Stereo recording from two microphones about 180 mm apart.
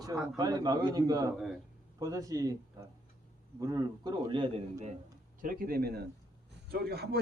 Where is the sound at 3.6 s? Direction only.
20° right (ahead or behind).